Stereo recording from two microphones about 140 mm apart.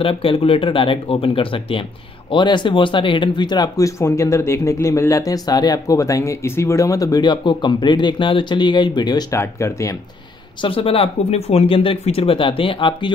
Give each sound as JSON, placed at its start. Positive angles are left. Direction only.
{"t": 0.0, "sound": "speech", "side_deg": 40}
{"t": 9.4, "sound": "speech", "side_deg": 20}
{"t": 10.6, "sound": "speech", "side_deg": 40}